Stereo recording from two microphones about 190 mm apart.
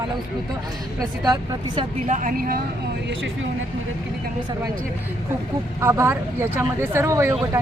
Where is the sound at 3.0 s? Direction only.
85° right.